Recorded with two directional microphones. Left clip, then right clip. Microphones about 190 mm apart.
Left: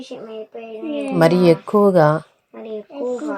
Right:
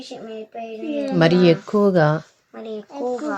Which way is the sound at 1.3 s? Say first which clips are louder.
Left 2 dB; centre (ahead or behind).